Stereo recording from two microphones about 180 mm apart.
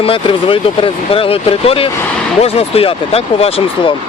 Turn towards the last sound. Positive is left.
turn(degrees=30)  # may be behind; listen again after turning